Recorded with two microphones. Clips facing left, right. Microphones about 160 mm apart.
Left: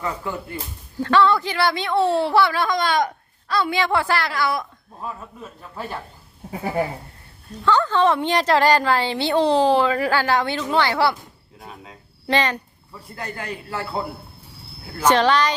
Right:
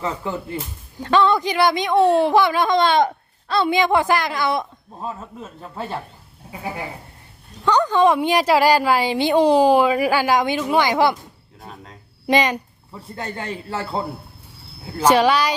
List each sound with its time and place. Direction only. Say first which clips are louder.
0.0 s a woman's voice: right 2 dB; 25° right (ahead or behind)
7.6 s a woman's voice: right 2 dB; 15° right (ahead or behind)
11.6 s speech: right 1 dB; 5° left (ahead or behind)
12.3 s a woman's voice: right 3 dB; 10° right (ahead or behind)
12.9 s speech: right 3 dB; 25° right (ahead or behind)
15.0 s a woman's voice: right 1 dB; 10° right (ahead or behind)